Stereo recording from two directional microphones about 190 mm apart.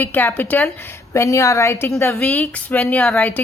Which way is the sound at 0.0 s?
10° left (ahead or behind).